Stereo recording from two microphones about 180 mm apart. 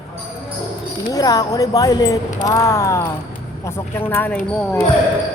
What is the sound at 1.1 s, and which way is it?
Speech, 20° left (ahead or behind).